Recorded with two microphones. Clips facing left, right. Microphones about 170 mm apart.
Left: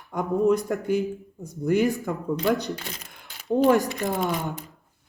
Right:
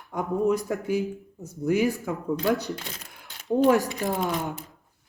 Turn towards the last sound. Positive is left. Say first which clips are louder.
# left 1 dB
turn(degrees=0)  # may be behind; listen again after turning